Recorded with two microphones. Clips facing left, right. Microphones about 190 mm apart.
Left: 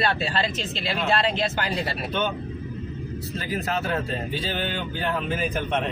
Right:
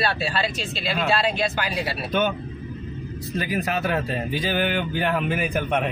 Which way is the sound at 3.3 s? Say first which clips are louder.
Right 3 dB; 15° right (ahead or behind).